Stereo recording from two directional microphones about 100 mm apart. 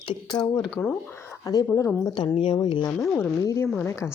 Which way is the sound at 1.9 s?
20° left (ahead or behind).